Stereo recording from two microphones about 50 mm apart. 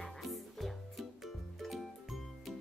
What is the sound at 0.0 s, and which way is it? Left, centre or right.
Music, centre.